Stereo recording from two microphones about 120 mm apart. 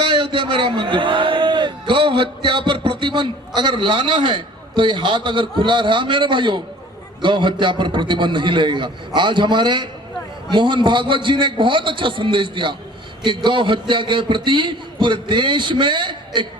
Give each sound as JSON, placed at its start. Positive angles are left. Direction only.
{"t": 0.0, "sound": "a man's voice", "side_deg": -40}